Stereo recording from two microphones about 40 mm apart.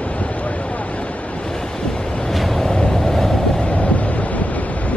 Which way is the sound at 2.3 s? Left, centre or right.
Centre.